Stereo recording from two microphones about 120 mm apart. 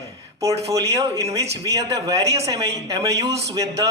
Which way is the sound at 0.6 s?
25° right (ahead or behind).